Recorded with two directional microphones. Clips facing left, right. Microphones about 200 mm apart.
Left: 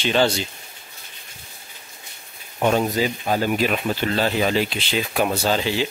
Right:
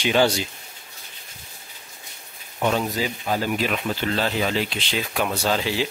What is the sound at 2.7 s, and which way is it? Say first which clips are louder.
Speech: left 4 dB; 40° left (ahead or behind).